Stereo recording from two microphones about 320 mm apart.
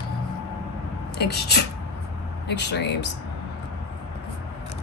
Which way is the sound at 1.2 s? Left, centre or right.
Left.